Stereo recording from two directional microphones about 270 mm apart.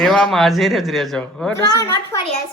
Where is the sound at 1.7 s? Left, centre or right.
Centre.